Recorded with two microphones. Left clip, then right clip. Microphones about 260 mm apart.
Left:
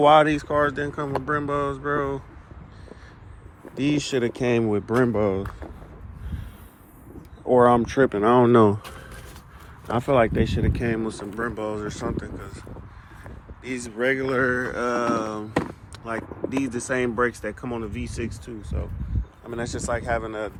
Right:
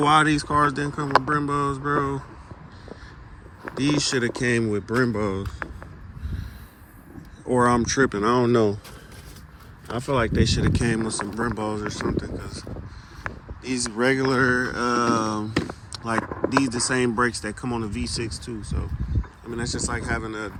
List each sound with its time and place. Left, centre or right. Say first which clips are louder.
0.0 s speech: left 3 dB; centre
3.8 s speech: right 1 dB; centre
7.5 s speech: left 3 dB; centre
9.9 s speech: left 4 dB; centre
13.7 s speech: right 2 dB; centre